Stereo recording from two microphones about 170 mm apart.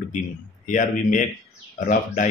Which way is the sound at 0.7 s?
50° left (ahead or behind).